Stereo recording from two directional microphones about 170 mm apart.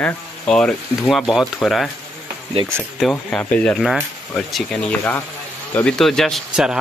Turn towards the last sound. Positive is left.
turn(degrees=0)  # may be behind; listen again after turning